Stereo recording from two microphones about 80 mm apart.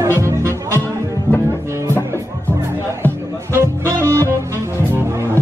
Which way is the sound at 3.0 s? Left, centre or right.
Left.